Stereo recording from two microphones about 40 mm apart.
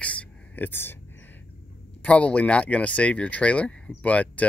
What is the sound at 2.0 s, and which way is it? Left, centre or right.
Speech, left.